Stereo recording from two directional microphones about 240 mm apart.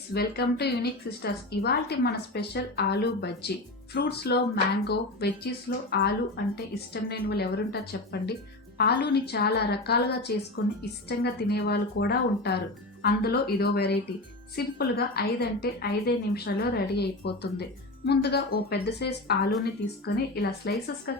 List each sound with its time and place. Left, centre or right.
0.1 s a woman's voice: left